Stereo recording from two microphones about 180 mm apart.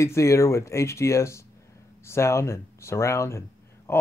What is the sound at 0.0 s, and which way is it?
Speech, 15° left (ahead or behind).